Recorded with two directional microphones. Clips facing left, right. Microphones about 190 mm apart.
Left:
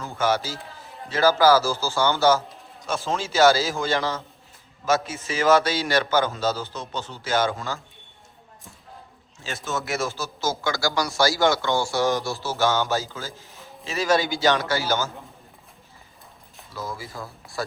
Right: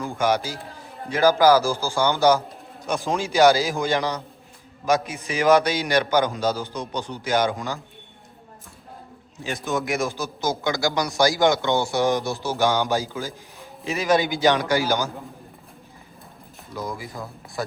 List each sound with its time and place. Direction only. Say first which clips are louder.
0.0 s a man's voice: right 2 dB; 15° right (ahead or behind)
9.4 s a man's voice: right 4 dB; 15° right (ahead or behind)
16.7 s a man's voice: right 2 dB; 15° right (ahead or behind)